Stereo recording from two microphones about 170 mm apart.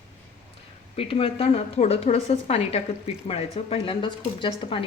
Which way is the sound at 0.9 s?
35° left (ahead or behind).